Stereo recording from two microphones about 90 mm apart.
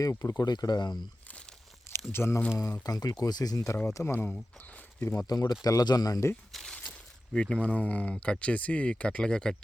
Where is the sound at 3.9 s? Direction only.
30° left (ahead or behind).